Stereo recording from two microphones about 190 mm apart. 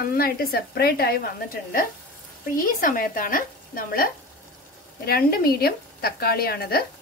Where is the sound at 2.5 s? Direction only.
45° left (ahead or behind).